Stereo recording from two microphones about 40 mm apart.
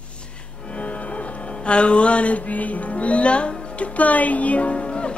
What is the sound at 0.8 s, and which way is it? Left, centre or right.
Music, left.